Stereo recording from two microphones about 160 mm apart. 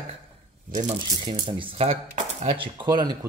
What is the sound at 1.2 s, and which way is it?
Speech, 30° right (ahead or behind).